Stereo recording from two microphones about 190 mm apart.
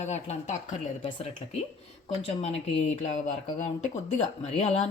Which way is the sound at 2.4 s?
35° left (ahead or behind).